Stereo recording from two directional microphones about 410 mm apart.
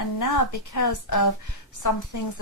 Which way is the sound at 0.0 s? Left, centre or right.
Left.